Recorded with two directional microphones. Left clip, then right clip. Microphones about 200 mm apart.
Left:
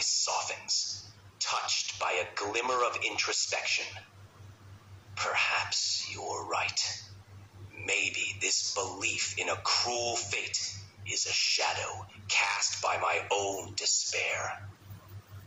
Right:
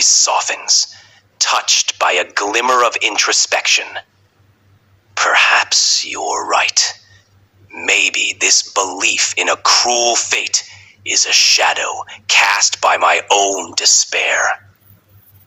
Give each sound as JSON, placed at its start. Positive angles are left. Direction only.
{"t": 0.0, "sound": "speech", "side_deg": -40}
{"t": 5.1, "sound": "whispering", "side_deg": -40}
{"t": 7.9, "sound": "speech", "side_deg": -40}